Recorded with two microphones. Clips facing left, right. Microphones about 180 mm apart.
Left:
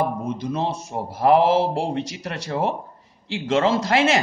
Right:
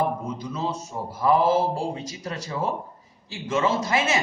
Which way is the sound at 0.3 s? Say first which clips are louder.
Left 4 dB; 75° left (ahead or behind).